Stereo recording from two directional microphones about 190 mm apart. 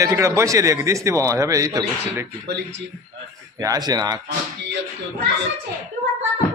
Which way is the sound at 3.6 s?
20° right (ahead or behind).